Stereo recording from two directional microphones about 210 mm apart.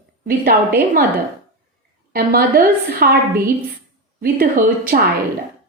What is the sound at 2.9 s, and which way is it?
A woman's voice, 45° right (ahead or behind).